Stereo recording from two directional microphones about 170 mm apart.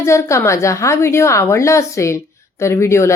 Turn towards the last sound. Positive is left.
turn(degrees=15)  # may be behind; listen again after turning